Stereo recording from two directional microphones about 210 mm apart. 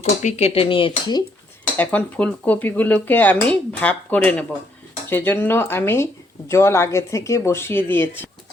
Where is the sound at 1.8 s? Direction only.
10° left (ahead or behind).